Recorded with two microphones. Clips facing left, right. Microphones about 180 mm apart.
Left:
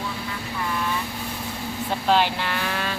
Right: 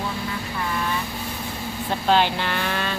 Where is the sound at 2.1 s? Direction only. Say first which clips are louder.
Right 1 dB; 5° left (ahead or behind).